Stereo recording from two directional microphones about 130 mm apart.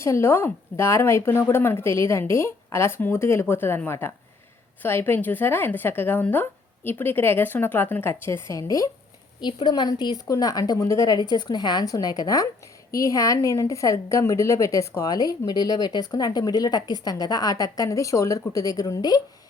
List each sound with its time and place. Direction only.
0.0 s a woman's voice: 20° left (ahead or behind)
9.4 s a woman's voice: 35° left (ahead or behind)